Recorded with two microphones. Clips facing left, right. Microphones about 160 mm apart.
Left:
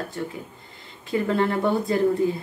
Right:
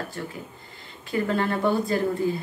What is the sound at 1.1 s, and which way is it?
A woman's voice, 20° left (ahead or behind).